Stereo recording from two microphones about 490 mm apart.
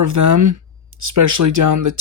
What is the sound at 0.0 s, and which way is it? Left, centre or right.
Speech, right.